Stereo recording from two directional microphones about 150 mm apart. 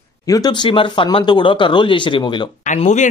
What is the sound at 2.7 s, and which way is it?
Speech, 55° left (ahead or behind).